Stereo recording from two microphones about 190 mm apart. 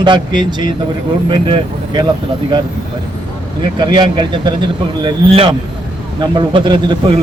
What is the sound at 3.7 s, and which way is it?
A man's voice, 25° right (ahead or behind).